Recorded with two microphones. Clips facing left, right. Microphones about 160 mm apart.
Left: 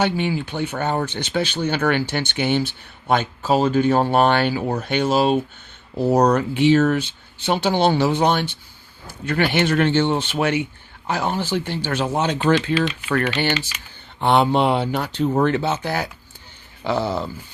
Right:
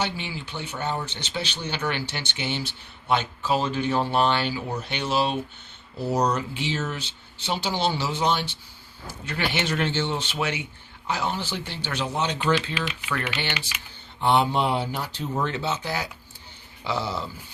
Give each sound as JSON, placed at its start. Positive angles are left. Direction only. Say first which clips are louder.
{"t": 0.0, "sound": "speech", "louder": "left 9 dB", "side_deg": 50}
{"t": 6.1, "sound": "speech", "louder": "left 7 dB", "side_deg": 60}
{"t": 14.2, "sound": "speech", "louder": "left 5 dB", "side_deg": 65}